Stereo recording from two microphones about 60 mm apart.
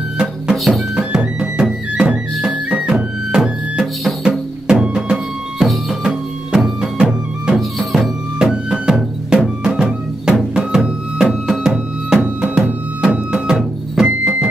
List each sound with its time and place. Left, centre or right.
0.2 s music: centre
7.5 s music: centre
12.2 s music: centre
14.0 s music: right